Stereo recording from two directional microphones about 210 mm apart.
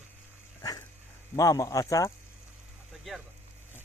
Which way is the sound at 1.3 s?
15° left (ahead or behind).